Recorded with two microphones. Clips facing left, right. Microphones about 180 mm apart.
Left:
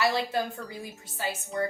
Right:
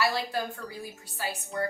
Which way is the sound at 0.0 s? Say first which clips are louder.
Left 2 dB; 20° left (ahead or behind).